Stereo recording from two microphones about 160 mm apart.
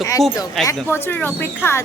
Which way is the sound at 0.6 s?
15° left (ahead or behind).